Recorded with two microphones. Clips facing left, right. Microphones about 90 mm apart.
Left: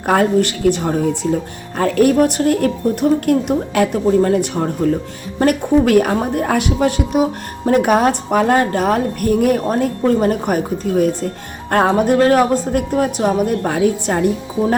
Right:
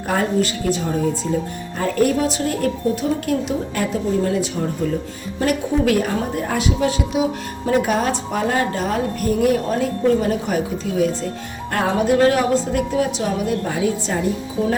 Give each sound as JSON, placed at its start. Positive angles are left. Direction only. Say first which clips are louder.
{"t": 0.1, "sound": "a woman's voice", "louder": "left 5 dB", "side_deg": 65}